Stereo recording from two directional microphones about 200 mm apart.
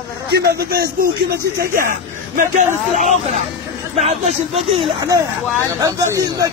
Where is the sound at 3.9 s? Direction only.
30° right (ahead or behind).